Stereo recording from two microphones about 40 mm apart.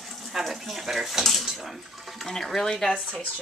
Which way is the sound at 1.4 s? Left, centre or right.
Centre.